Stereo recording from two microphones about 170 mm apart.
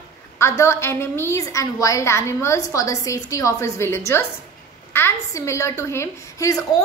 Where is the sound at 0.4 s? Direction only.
15° left (ahead or behind).